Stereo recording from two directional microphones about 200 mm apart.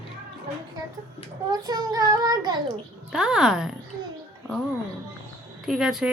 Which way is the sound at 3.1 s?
5° right (ahead or behind).